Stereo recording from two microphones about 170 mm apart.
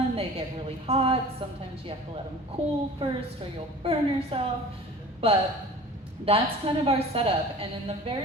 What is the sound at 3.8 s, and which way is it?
Speech, 30° right (ahead or behind).